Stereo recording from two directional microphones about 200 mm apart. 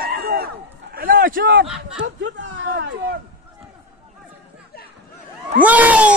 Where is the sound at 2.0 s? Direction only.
70° right (ahead or behind).